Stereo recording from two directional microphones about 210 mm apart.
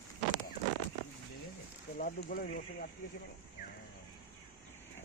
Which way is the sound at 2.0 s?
45° left (ahead or behind).